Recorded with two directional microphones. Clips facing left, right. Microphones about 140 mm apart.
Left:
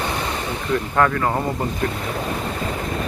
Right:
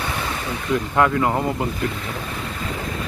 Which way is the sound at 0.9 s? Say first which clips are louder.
Right 1 dB; 10° right (ahead or behind).